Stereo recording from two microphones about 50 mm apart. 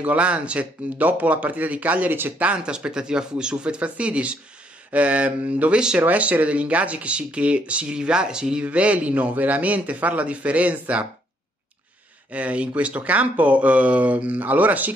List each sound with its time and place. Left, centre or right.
0.0 s speech: right
5.9 s speech: right
8.6 s speech: right
12.3 s speech: right